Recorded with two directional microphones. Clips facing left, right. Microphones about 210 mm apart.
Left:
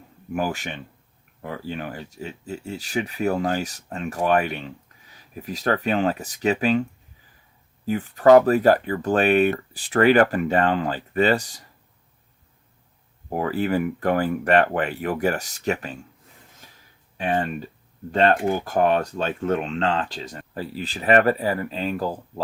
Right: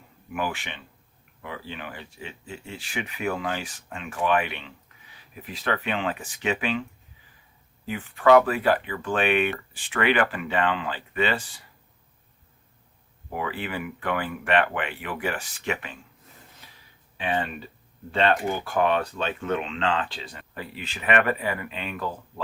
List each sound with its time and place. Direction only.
0.3 s speech: 40° left (ahead or behind)
7.9 s speech: 40° left (ahead or behind)
13.3 s speech: 40° left (ahead or behind)
17.2 s speech: 45° left (ahead or behind)